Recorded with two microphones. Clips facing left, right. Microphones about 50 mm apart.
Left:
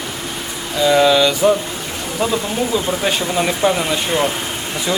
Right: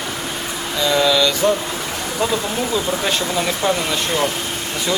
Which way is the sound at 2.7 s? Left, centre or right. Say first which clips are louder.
Left 1 dB; centre.